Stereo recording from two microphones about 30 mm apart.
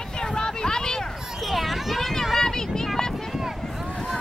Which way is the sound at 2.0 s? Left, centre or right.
Centre.